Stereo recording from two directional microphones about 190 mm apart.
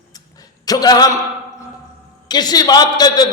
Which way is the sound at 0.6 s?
20° left (ahead or behind).